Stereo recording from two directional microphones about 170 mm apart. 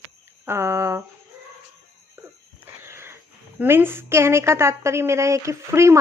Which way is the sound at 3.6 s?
10° right (ahead or behind).